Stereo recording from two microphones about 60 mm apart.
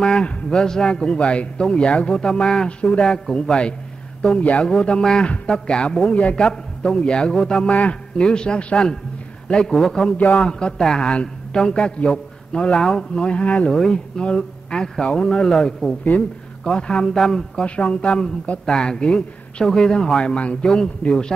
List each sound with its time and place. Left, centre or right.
0.0 s a man's voice: centre
16.0 s a man's voice: left; by 17.6 s centre
17.6 s a man's voice: centre